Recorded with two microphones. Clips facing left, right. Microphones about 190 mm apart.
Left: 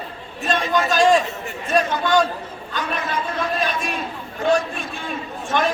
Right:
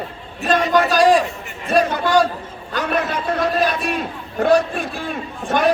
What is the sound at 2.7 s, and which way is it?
A man's voice, 65° right (ahead or behind).